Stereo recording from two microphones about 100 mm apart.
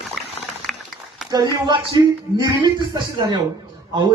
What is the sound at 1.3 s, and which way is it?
Mantra, 45° right (ahead or behind).